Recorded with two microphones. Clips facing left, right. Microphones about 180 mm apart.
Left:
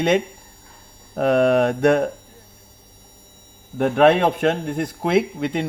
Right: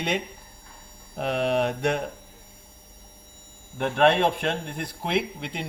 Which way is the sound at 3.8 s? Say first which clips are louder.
Left 5 dB; 50° left (ahead or behind).